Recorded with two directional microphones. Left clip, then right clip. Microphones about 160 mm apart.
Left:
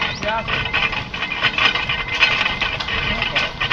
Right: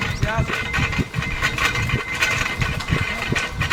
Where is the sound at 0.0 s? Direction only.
25° left (ahead or behind).